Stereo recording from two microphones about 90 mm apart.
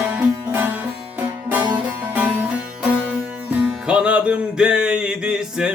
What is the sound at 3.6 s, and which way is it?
Music, 10° right (ahead or behind).